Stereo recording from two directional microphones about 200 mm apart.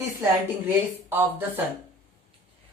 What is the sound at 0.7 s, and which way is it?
Speech, 10° right (ahead or behind).